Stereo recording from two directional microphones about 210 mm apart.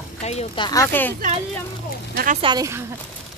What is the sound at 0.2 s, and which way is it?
Speech, 30° left (ahead or behind).